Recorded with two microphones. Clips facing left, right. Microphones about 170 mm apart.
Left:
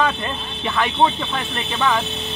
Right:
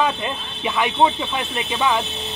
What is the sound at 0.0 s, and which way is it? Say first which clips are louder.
Speech: even; 10° right (ahead or behind).